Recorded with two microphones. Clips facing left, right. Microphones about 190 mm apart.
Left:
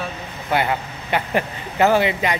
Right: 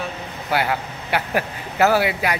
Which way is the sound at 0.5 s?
5° right (ahead or behind).